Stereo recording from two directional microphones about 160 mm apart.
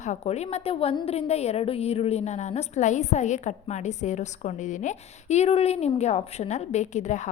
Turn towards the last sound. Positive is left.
turn(degrees=50)  # may be behind; listen again after turning